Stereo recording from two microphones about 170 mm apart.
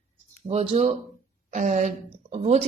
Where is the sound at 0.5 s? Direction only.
40° right (ahead or behind).